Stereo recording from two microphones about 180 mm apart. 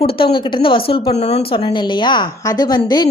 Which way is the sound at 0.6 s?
30° left (ahead or behind).